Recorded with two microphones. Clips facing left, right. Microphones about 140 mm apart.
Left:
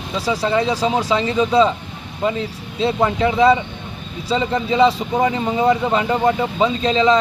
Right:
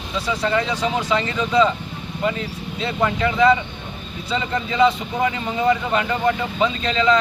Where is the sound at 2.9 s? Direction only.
25° left (ahead or behind).